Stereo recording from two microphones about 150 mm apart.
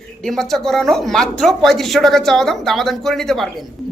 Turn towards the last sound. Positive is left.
turn(degrees=0)  # may be behind; listen again after turning